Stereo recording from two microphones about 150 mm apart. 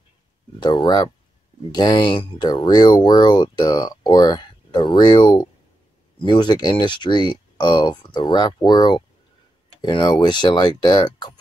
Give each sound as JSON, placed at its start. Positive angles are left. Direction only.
{"t": 0.6, "sound": "speech", "side_deg": 30}